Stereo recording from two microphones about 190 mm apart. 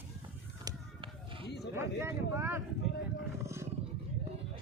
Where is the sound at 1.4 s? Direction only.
60° left (ahead or behind).